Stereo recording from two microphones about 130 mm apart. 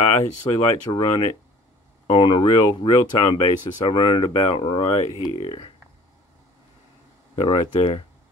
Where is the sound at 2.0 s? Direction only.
40° left (ahead or behind).